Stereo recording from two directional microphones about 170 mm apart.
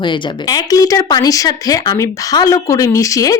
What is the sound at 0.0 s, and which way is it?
Speech, 25° left (ahead or behind).